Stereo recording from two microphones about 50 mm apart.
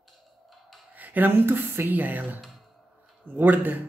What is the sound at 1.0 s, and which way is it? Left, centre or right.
A woman's voice, right.